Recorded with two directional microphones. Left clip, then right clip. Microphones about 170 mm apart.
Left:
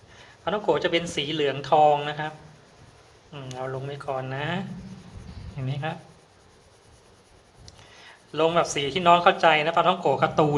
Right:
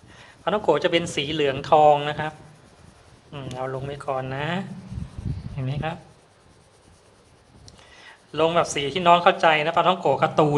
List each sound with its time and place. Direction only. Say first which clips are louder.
0.4 s speech: right 3 dB; 20° right (ahead or behind)
3.3 s speech: right 3 dB; 15° right (ahead or behind)
7.6 s speech: right 1 dB; 5° right (ahead or behind)